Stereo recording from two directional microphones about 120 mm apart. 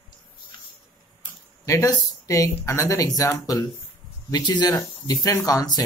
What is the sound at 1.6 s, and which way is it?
Speech, 25° left (ahead or behind).